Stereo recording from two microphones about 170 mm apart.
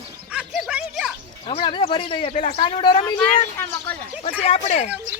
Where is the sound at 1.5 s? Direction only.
30° left (ahead or behind).